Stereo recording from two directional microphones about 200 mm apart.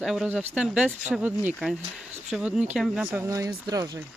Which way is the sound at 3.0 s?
10° right (ahead or behind).